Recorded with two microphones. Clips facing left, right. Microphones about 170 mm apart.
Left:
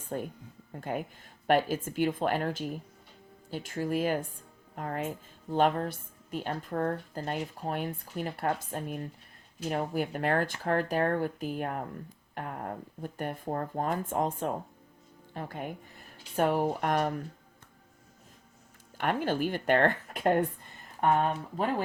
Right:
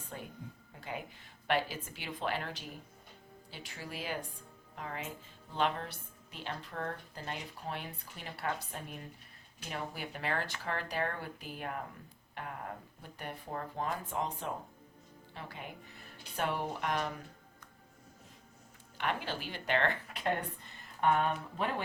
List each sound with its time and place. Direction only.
0.1 s speech: 50° left (ahead or behind)
18.9 s speech: 50° left (ahead or behind)